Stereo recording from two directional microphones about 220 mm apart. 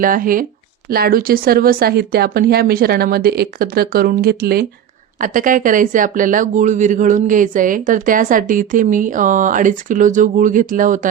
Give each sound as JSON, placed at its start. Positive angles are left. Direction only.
{"t": 0.0, "sound": "speech", "side_deg": -40}